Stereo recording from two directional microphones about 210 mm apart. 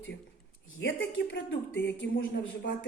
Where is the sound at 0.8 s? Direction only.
60° left (ahead or behind).